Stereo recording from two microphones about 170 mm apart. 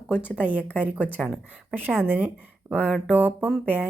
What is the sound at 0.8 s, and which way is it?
Speech, 10° right (ahead or behind).